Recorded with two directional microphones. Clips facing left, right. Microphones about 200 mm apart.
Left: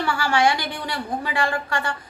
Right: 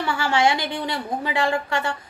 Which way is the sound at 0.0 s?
20° right (ahead or behind).